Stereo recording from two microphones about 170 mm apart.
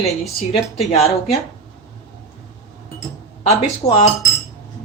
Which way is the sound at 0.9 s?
35° left (ahead or behind).